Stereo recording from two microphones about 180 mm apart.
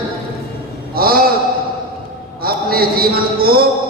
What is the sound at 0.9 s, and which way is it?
Speech, 55° right (ahead or behind).